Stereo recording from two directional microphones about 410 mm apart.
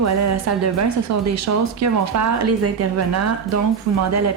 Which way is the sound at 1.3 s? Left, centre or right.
Right.